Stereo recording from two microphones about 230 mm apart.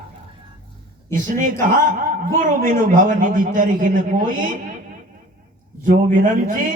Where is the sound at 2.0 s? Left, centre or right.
Right.